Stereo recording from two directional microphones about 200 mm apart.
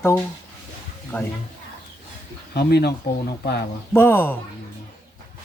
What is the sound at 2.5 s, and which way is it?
Speech, 55° left (ahead or behind).